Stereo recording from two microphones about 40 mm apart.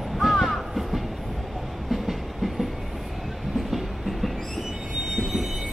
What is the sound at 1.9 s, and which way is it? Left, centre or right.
Train, centre.